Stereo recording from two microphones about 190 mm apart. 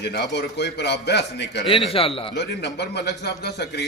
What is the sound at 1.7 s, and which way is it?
Speech, 30° left (ahead or behind).